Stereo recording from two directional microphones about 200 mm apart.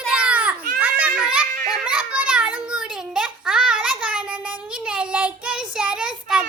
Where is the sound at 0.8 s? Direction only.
5° right (ahead or behind).